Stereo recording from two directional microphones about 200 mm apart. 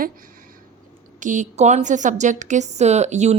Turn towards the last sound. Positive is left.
turn(degrees=-35)  # may be behind; listen again after turning